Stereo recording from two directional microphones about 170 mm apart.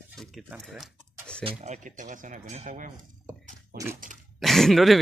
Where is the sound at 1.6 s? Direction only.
45° right (ahead or behind).